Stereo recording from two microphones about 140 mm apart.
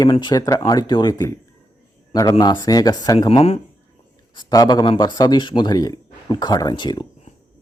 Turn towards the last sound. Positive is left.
turn(degrees=30)  # may be behind; listen again after turning